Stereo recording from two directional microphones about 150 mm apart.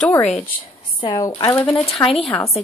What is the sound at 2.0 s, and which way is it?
Speech, 35° left (ahead or behind).